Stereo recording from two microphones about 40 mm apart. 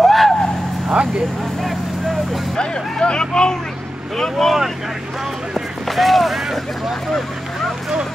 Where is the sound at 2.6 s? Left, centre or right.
Left.